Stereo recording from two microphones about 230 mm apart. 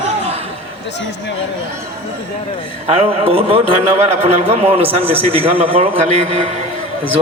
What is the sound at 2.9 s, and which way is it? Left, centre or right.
A man's voice, right.